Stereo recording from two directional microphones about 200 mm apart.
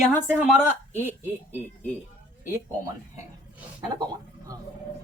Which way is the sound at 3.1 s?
15° right (ahead or behind).